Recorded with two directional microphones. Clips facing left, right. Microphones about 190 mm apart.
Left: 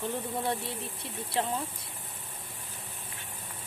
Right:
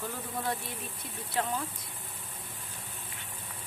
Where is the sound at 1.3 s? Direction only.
30° left (ahead or behind).